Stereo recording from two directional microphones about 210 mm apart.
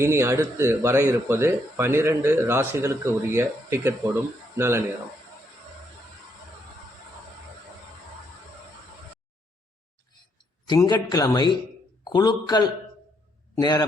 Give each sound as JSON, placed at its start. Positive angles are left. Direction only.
{"t": 0.0, "sound": "speech", "side_deg": -15}
{"t": 10.7, "sound": "speech", "side_deg": 20}